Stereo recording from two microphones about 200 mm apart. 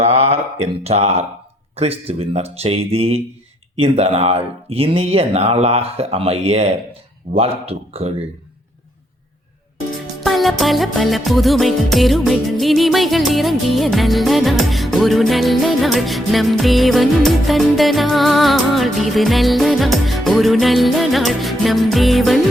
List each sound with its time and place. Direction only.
0.0 s a sound: 30° right (ahead or behind)
0.9 s speech: 30° right (ahead or behind)
10.2 s music: centre (ahead or behind)